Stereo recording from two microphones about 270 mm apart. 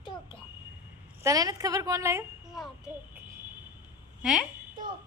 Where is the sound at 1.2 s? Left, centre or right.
Centre.